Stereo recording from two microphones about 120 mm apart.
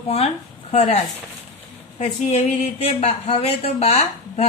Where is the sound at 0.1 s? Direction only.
60° left (ahead or behind).